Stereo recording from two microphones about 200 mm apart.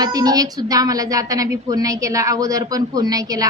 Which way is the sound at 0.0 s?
20° right (ahead or behind).